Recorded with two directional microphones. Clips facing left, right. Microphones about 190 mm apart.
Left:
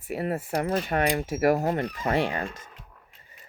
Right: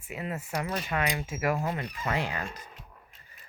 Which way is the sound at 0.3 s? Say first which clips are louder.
Left 5 dB; 30° left (ahead or behind).